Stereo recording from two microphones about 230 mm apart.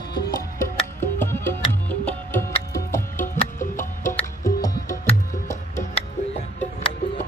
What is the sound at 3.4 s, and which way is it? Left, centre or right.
Music, left.